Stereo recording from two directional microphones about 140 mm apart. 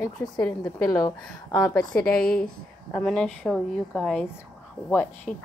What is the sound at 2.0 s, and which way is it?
Speech, 90° left.